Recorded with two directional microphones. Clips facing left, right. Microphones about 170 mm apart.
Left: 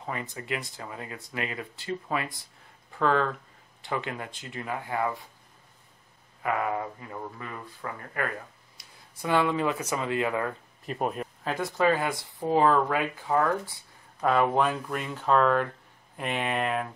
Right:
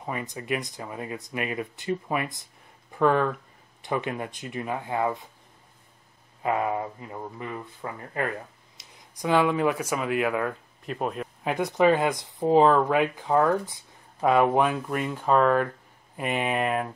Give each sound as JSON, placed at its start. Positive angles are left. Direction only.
{"t": 0.0, "sound": "speech", "side_deg": -20}
{"t": 6.4, "sound": "speech", "side_deg": -25}
{"t": 11.4, "sound": "speech", "side_deg": -20}